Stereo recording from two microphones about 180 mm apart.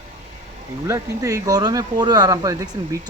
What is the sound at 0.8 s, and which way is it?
Speech, 15° right (ahead or behind).